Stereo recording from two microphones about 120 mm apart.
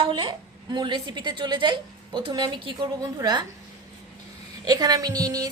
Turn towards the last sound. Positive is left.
turn(degrees=-30)  # may be behind; listen again after turning